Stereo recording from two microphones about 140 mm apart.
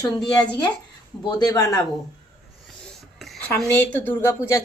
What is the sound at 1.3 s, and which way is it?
Speech, 25° left (ahead or behind).